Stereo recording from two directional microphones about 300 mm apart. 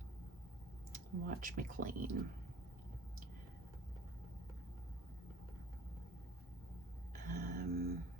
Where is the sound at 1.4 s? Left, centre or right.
Right.